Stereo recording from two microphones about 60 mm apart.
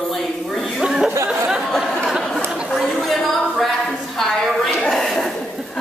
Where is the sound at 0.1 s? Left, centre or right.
Centre.